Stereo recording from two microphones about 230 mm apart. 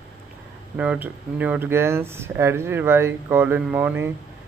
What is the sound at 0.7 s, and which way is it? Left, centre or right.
Speech, centre.